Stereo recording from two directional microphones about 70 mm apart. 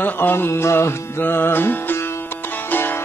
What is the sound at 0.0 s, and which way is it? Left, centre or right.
Speech, left.